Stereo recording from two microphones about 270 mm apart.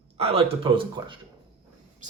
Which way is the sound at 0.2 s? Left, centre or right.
Right.